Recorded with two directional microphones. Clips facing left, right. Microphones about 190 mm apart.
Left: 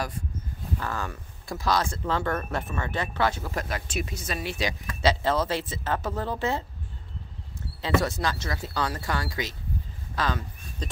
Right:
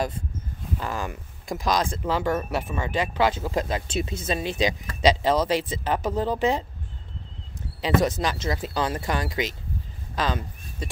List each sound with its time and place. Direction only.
0.7 s speech: 15° right (ahead or behind)
7.8 s speech: 20° right (ahead or behind)